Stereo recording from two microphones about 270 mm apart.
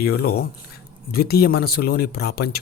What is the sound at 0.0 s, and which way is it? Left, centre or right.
Speech, left.